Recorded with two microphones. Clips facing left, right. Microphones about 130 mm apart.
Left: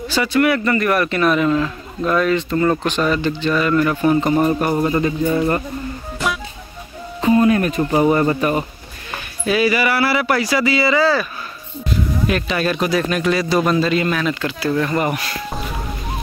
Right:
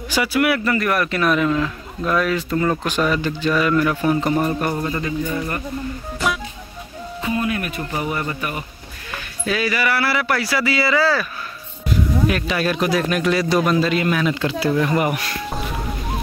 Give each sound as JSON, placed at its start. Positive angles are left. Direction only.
{"t": 0.1, "sound": "a man's voice", "side_deg": -10}
{"t": 4.7, "sound": "speech", "side_deg": 25}
{"t": 7.2, "sound": "a sound", "side_deg": 35}
{"t": 8.0, "sound": "speech", "side_deg": 40}
{"t": 9.5, "sound": "a man's voice", "side_deg": 5}
{"t": 12.3, "sound": "a man's voice", "side_deg": 0}
{"t": 14.3, "sound": "speech", "side_deg": -25}
{"t": 14.7, "sound": "speech", "side_deg": -10}
{"t": 15.1, "sound": "music", "side_deg": 0}